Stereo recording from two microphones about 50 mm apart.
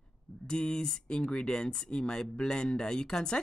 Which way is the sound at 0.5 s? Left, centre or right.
Centre.